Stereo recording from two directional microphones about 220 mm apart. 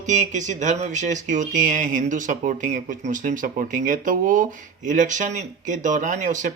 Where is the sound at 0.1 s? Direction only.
35° right (ahead or behind).